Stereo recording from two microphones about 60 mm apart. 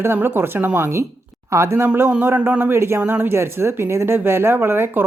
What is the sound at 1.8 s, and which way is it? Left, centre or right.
Speech, right.